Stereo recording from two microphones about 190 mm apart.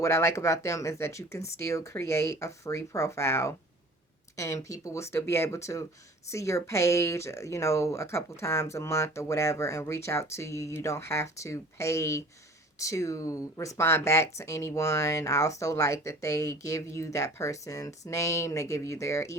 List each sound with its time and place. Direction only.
0.0 s speech: 15° left (ahead or behind)